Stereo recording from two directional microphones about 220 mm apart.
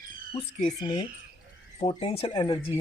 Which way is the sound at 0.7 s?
20° left (ahead or behind).